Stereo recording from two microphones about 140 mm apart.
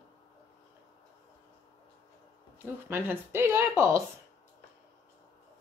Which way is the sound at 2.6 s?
15° right (ahead or behind).